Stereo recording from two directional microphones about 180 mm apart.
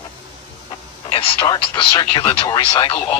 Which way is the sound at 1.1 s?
30° left (ahead or behind).